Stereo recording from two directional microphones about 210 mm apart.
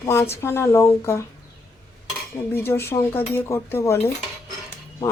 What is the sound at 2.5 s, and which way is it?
Speech, 10° left (ahead or behind).